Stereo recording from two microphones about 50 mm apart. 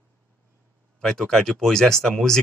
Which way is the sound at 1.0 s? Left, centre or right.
Centre.